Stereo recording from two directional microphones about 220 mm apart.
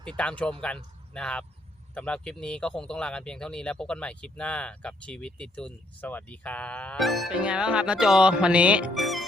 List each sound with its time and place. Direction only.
0.2 s speech: 5° left (ahead or behind)